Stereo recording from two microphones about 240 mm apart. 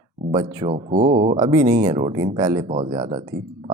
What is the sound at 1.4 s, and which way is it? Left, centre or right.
Speech, centre.